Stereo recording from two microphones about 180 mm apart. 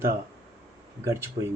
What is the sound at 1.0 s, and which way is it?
Speech, 15° right (ahead or behind).